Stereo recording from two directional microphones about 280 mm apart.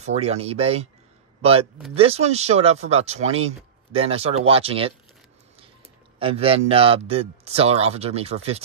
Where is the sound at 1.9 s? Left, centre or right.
Right.